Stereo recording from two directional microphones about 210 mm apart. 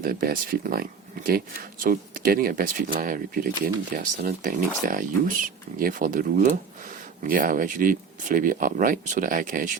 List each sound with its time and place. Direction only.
0.0 s speech: 45° right (ahead or behind)